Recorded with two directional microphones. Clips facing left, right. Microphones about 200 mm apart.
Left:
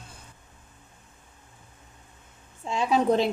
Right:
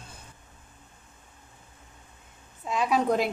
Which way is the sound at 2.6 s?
25° left (ahead or behind).